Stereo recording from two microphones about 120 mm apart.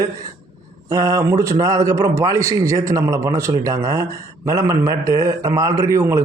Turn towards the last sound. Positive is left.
turn(degrees=-25)  # may be behind; listen again after turning